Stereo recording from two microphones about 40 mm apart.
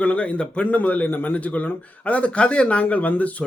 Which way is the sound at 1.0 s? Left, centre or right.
Left.